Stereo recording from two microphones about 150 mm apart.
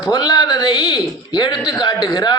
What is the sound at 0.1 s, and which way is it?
A man's voice, 25° left (ahead or behind).